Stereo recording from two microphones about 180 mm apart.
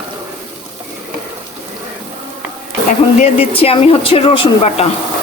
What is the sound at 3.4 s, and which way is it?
Speech, 30° left (ahead or behind).